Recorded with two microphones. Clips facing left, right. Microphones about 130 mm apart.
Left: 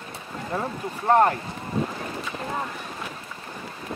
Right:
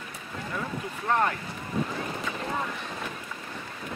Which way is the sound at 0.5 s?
40° left (ahead or behind).